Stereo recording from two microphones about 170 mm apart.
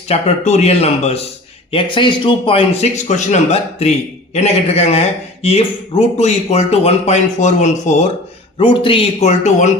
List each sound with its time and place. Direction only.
0.1 s speech: 40° left (ahead or behind)
3.0 s speech: 45° left (ahead or behind)
8.5 s speech: 30° left (ahead or behind)